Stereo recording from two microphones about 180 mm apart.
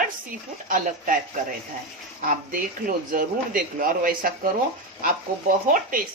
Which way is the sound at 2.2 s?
50° right (ahead or behind).